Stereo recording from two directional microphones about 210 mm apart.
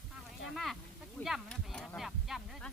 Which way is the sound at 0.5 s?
Centre (ahead or behind).